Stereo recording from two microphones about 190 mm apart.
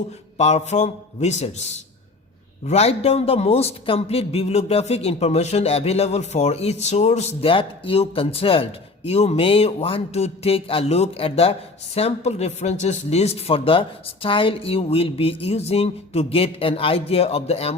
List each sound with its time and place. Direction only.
0.3 s speech: 35° left (ahead or behind)